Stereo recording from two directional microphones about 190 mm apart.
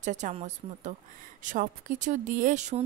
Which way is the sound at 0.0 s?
40° right (ahead or behind).